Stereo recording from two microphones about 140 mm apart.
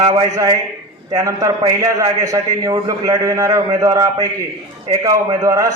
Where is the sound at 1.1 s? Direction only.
25° right (ahead or behind).